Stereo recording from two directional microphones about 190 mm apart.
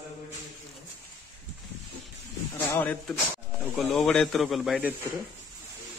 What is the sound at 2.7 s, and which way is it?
Speech, 10° left (ahead or behind).